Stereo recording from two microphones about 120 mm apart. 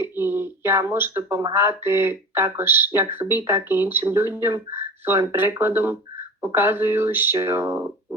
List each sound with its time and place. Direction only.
0.0 s speech: 20° right (ahead or behind)